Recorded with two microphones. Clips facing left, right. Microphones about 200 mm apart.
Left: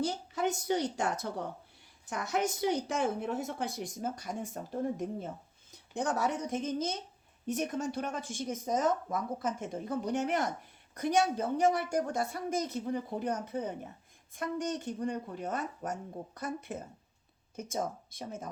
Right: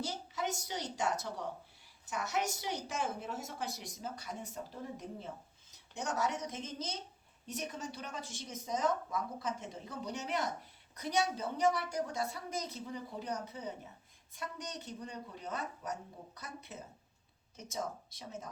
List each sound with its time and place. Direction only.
0.3 s a woman's voice: 55° left (ahead or behind)